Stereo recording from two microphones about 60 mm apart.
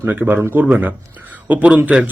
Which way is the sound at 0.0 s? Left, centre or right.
Right.